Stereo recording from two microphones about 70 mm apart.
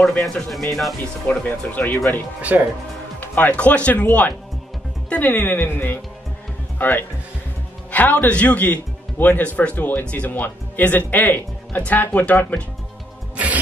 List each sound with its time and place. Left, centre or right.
0.2 s speech: centre
1.2 s speech: left
2.5 s speech: right
3.2 s speech: left